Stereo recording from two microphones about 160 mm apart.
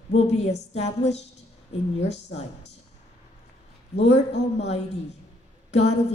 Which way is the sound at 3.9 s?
40° left (ahead or behind).